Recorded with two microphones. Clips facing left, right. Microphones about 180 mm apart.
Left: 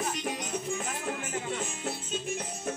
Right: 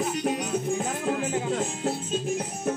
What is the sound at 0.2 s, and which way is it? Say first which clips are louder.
Music: right 7 dB; 60° right (ahead or behind).